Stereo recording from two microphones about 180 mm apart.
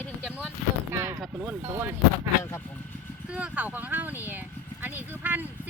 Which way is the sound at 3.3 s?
10° right (ahead or behind).